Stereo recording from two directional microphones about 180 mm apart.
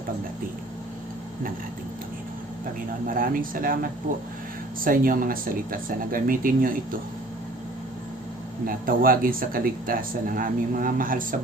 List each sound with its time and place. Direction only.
3.1 s speech: 50° right (ahead or behind)
4.8 s speech: 50° right (ahead or behind)
8.6 s speech: 50° right (ahead or behind)